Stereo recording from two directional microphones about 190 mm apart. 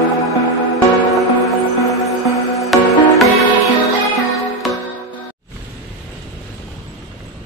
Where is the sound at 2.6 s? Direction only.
Centre (ahead or behind).